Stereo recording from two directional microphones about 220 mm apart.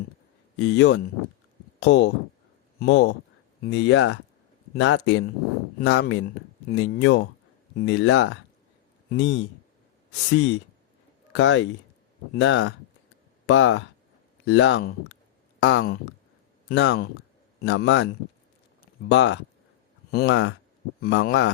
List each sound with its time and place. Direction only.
0.6 s speech: 55° left (ahead or behind)